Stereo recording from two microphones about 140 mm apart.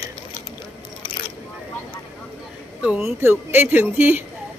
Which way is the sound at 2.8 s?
10° right (ahead or behind).